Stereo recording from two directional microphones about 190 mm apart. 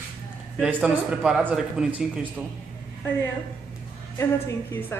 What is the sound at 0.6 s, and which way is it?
Speech, 5° right (ahead or behind).